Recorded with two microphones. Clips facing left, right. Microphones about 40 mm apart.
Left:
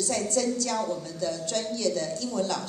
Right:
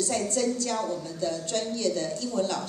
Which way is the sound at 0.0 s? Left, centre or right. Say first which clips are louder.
Even; right.